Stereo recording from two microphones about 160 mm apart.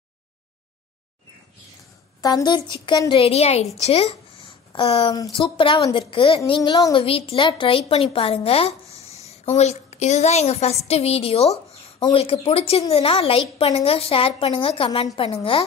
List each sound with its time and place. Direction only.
2.2 s a woman's voice: 25° left (ahead or behind)
5.1 s a woman's voice: 25° left (ahead or behind)